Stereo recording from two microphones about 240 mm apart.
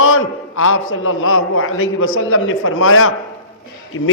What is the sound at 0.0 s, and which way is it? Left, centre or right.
A man's voice, left.